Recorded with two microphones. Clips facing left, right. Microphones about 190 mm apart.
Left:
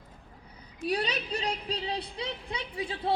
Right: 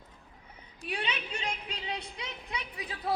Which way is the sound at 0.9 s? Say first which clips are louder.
Left 6 dB; 40° left (ahead or behind).